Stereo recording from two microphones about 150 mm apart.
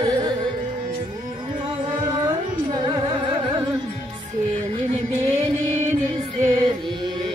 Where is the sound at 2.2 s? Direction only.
25° right (ahead or behind).